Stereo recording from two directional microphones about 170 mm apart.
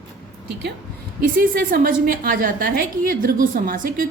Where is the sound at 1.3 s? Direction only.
60° right (ahead or behind).